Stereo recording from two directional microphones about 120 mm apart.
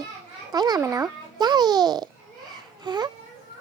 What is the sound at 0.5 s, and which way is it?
A child's voice, 35° right (ahead or behind).